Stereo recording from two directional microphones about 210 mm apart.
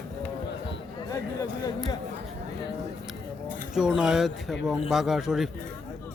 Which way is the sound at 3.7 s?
5° right (ahead or behind).